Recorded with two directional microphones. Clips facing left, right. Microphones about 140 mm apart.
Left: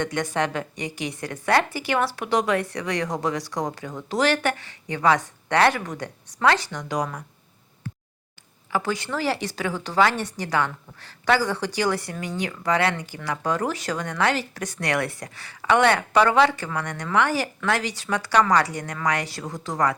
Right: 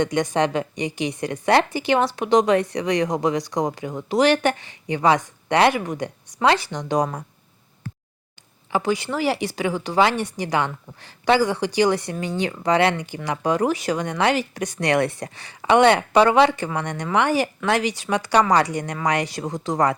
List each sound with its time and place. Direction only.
0.0 s speech: 20° right (ahead or behind)
8.7 s speech: 15° right (ahead or behind)